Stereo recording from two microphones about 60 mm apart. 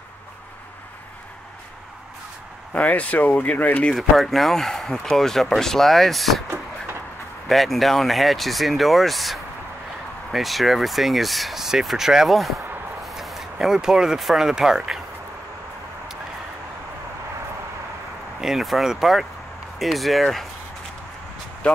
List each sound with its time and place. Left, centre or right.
2.7 s speech: left
3.9 s speech: centre
7.4 s speech: centre
18.4 s speech: centre
21.6 s speech: left